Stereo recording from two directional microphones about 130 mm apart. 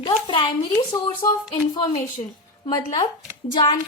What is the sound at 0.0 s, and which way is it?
Speech, 40° left (ahead or behind).